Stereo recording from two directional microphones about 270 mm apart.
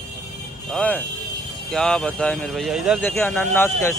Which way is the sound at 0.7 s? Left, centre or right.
Centre.